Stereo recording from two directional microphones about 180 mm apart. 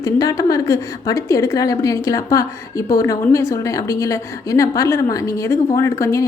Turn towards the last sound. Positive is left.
turn(degrees=15)  # may be behind; listen again after turning